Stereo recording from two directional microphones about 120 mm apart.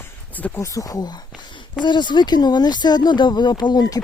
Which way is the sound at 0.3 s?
15° left (ahead or behind).